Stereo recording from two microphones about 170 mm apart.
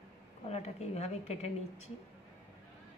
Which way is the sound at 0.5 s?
40° left (ahead or behind).